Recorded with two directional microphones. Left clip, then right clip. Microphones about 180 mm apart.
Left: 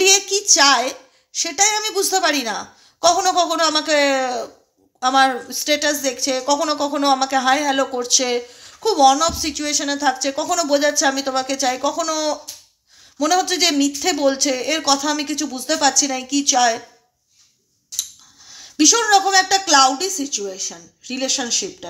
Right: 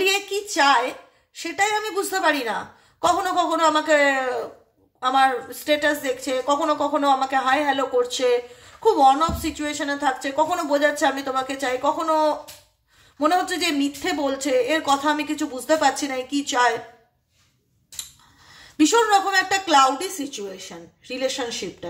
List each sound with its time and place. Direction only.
0.0 s a woman's voice: 40° left (ahead or behind)
18.9 s speech: 35° left (ahead or behind)